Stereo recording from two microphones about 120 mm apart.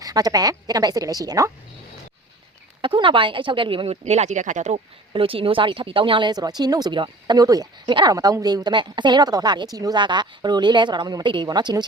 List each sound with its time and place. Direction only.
0.0 s speech: 30° right (ahead or behind)
2.8 s speech: 45° right (ahead or behind)
4.0 s speech: 70° right (ahead or behind)
5.1 s speech: 50° right (ahead or behind)